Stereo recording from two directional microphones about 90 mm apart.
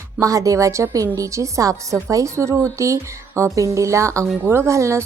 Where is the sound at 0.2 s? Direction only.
40° right (ahead or behind).